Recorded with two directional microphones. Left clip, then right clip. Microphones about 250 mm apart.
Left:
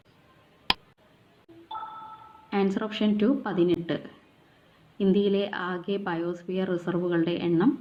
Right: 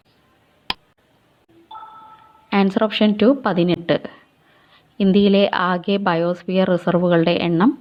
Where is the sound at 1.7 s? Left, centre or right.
Centre.